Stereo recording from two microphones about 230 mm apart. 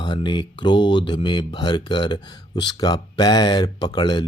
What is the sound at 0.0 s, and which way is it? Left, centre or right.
Speech, centre.